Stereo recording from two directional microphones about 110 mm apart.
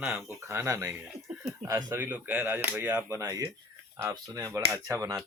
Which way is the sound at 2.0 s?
15° right (ahead or behind).